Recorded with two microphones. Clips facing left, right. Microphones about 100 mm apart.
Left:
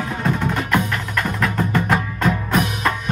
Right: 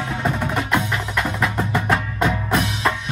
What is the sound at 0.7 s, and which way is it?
Music, 5° right (ahead or behind).